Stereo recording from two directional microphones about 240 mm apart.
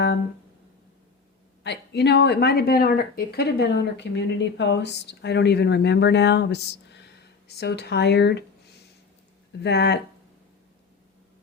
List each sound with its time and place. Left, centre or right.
1.6 s speech: left